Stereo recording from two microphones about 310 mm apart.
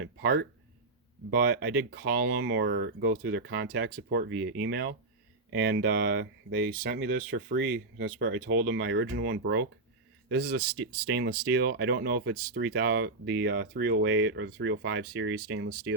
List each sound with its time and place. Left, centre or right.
0.0 s speech: right